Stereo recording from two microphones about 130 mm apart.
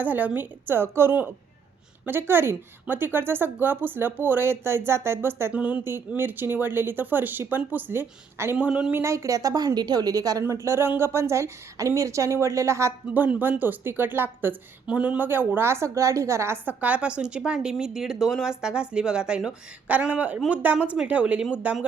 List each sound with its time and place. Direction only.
0.0 s a woman's voice: 15° right (ahead or behind)
9.0 s a woman's voice: 25° right (ahead or behind)